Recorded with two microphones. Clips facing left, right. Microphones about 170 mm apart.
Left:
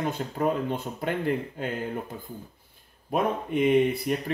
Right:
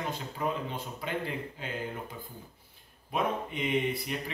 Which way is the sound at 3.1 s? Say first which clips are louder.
Left 6 dB; 50° left (ahead or behind).